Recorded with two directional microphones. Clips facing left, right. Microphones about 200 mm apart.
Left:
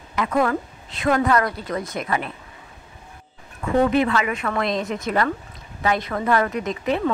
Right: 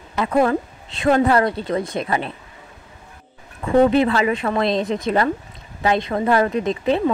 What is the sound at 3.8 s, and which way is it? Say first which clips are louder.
Speech: right 4 dB; 30° right (ahead or behind).